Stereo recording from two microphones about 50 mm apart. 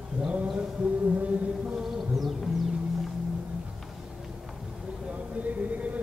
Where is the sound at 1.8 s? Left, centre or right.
Centre.